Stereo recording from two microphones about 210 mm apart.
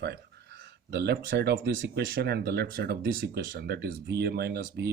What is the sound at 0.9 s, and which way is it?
Speech, 50° right (ahead or behind).